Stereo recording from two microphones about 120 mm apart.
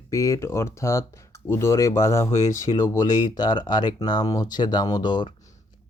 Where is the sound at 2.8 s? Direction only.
35° left (ahead or behind).